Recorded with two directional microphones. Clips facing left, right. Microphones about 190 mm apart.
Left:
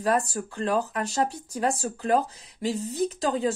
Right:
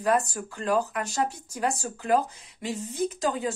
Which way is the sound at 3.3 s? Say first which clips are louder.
Left 4 dB; 30° left (ahead or behind).